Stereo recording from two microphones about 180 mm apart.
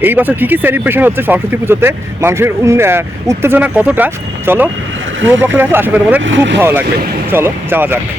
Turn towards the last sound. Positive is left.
turn(degrees=-10)  # may be behind; listen again after turning